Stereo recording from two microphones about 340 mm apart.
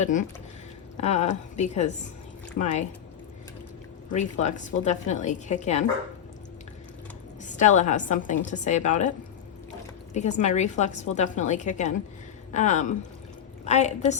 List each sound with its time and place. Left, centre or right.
0.0 s a woman's voice: left
4.1 s a woman's voice: left
7.4 s a woman's voice: left
10.2 s a woman's voice: left